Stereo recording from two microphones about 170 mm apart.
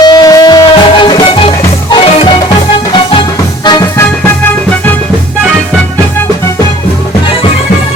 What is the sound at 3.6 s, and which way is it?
Music, 20° left (ahead or behind).